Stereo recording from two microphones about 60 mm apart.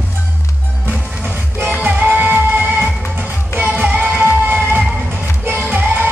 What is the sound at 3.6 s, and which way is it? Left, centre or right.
Music, right.